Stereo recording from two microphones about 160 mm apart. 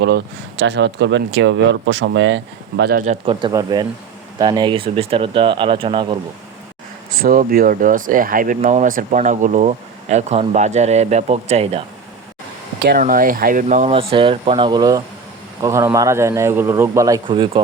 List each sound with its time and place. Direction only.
0.0 s speech: 90° right
2.7 s speech: 90° right
3.1 s speech: 35° right (ahead or behind)
7.2 s speech: 65° right (ahead or behind); by 11.8 s 40° right (ahead or behind)
12.8 s speech: 70° right (ahead or behind); by 13.9 s 50° right (ahead or behind)
13.9 s speech: 35° right (ahead or behind); by 17.2 s 20° right (ahead or behind)
17.2 s speech: 30° right (ahead or behind)